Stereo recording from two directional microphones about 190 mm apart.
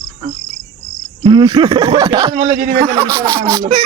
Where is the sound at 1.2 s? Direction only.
25° right (ahead or behind).